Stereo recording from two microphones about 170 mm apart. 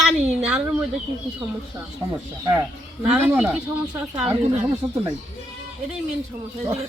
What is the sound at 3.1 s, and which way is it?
Speech, 10° right (ahead or behind).